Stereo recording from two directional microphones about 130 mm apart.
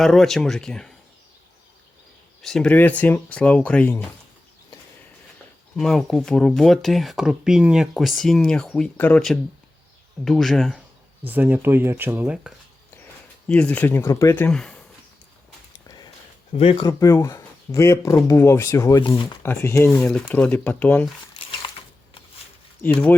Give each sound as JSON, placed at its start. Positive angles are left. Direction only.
{"t": 0.0, "sound": "speech", "side_deg": 5}
{"t": 2.4, "sound": "speech", "side_deg": 5}
{"t": 5.7, "sound": "speech", "side_deg": 5}
{"t": 10.2, "sound": "speech", "side_deg": 0}
{"t": 11.3, "sound": "speech", "side_deg": -15}
{"t": 13.5, "sound": "speech", "side_deg": 10}
{"t": 14.5, "sound": "speech", "side_deg": 5}
{"t": 16.5, "sound": "speech", "side_deg": 45}
{"t": 16.8, "sound": "speech", "side_deg": 25}
{"t": 19.4, "sound": "speech", "side_deg": 15}
{"t": 20.0, "sound": "speech", "side_deg": 5}
{"t": 22.8, "sound": "speech", "side_deg": 15}